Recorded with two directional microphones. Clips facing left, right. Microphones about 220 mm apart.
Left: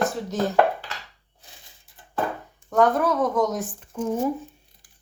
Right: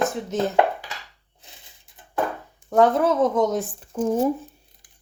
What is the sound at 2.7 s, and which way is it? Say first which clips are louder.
Speech: right 2 dB; 25° right (ahead or behind).